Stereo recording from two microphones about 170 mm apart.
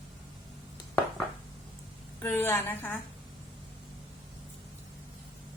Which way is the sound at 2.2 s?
10° left (ahead or behind).